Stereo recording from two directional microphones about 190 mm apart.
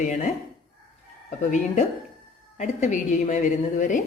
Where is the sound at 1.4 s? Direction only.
40° left (ahead or behind).